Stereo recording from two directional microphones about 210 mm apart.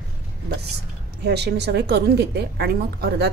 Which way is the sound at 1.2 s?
50° right (ahead or behind).